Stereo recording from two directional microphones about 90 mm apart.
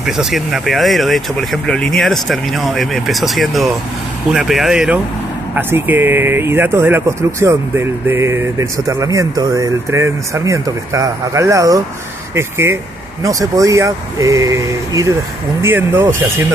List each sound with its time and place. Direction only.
0.0 s speech: 5° right (ahead or behind)
5.5 s speech: 25° right (ahead or behind); by 15.1 s 40° right (ahead or behind)
15.6 s speech: 25° right (ahead or behind)